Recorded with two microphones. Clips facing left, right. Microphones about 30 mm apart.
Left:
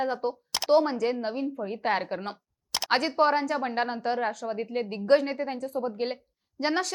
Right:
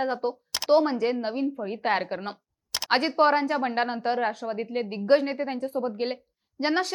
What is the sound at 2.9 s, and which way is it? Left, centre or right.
A woman's voice, right.